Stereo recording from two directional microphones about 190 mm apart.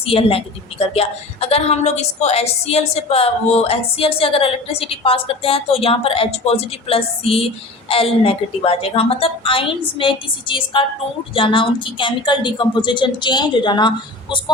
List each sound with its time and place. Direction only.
0.0 s a woman's voice: 30° left (ahead or behind)